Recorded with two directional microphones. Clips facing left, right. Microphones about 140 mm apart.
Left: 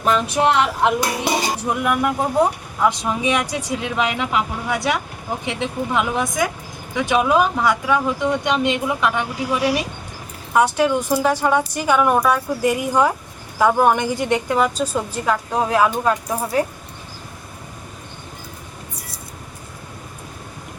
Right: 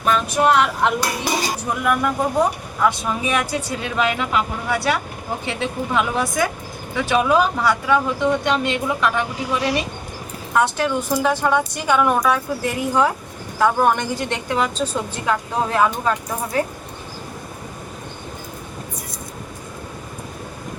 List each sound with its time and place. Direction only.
0.6 s a woman's voice: 20° left (ahead or behind); by 16.6 s 5° left (ahead or behind)